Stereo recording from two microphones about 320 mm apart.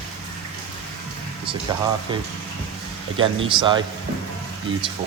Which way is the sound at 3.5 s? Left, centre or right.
Centre.